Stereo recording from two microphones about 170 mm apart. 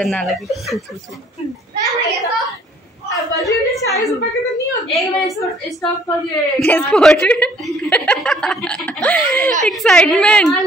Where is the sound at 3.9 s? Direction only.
20° left (ahead or behind).